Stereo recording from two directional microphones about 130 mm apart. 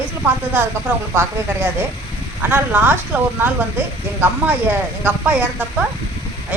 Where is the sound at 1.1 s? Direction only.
20° right (ahead or behind).